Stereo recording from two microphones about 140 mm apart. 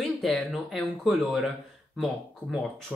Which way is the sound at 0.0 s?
Centre (ahead or behind).